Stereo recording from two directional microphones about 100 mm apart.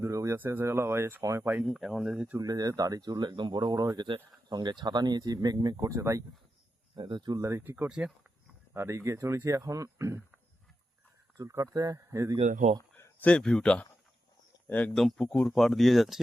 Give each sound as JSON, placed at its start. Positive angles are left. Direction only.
{"t": 0.0, "sound": "a sound", "side_deg": -30}
{"t": 0.3, "sound": "speech", "side_deg": -20}
{"t": 1.6, "sound": "speech", "side_deg": 0}
{"t": 2.4, "sound": "speech", "side_deg": -40}
{"t": 6.9, "sound": "speech", "side_deg": -50}
{"t": 7.4, "sound": "speech", "side_deg": -25}
{"t": 7.9, "sound": "speech", "side_deg": -10}
{"t": 8.7, "sound": "speech", "side_deg": -25}
{"t": 11.3, "sound": "speech", "side_deg": -30}
{"t": 13.0, "sound": "speech", "side_deg": 10}
{"t": 14.9, "sound": "speech", "side_deg": 5}